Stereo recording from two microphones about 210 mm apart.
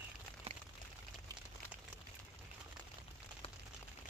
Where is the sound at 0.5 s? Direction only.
30° right (ahead or behind).